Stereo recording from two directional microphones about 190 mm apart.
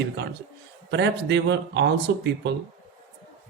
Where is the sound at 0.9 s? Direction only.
65° right (ahead or behind).